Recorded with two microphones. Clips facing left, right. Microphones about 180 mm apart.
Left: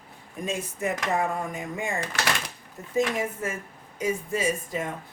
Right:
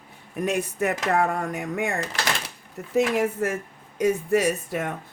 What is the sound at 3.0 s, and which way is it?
Speech, 70° right (ahead or behind).